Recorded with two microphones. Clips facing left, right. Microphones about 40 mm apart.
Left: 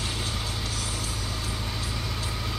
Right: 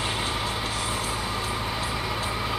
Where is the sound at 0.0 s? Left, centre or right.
Right.